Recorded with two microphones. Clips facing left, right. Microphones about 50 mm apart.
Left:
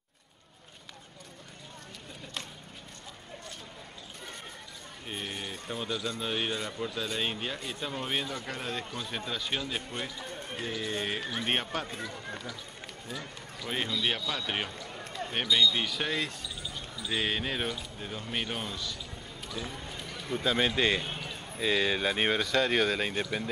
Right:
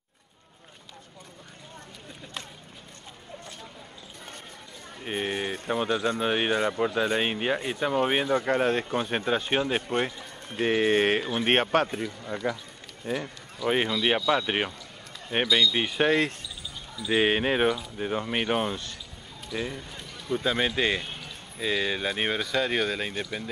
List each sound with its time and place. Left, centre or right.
5.0 s speech: right
13.7 s speech: right
19.5 s speech: right
19.9 s a sound: centre
20.4 s speech: centre